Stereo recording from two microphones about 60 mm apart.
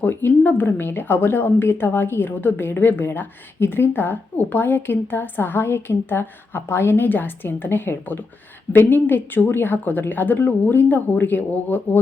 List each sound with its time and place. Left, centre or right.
0.0 s a woman's voice: left